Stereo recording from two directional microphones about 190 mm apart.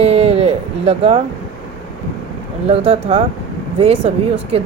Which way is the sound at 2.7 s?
35° right (ahead or behind).